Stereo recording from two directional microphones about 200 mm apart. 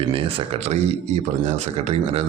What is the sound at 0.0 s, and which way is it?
A man's voice, 30° right (ahead or behind).